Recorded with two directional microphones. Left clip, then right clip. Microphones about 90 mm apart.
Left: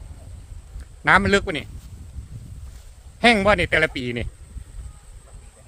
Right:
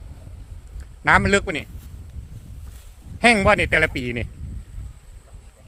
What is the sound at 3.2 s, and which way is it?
A man's voice, 20° right (ahead or behind).